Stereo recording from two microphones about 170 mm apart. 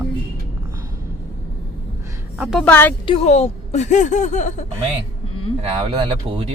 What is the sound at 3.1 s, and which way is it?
Speech, 40° left (ahead or behind).